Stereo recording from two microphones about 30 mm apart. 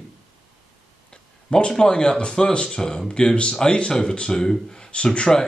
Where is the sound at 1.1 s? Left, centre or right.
Left.